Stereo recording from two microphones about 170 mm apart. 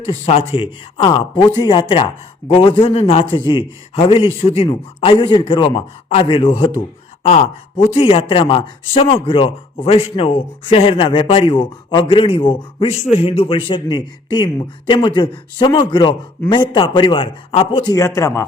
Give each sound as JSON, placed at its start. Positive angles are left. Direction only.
{"t": 0.1, "sound": "a man's voice", "side_deg": 35}
{"t": 18.0, "sound": "speech", "side_deg": 15}